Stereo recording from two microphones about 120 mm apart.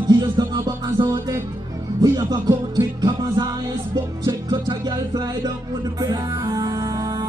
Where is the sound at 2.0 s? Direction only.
35° right (ahead or behind).